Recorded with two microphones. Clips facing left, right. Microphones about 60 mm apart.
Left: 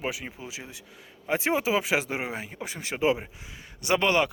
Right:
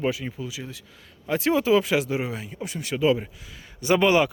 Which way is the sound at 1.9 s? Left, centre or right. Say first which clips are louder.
Right 4 dB; left.